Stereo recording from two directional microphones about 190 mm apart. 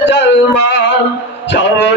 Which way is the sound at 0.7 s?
65° left (ahead or behind).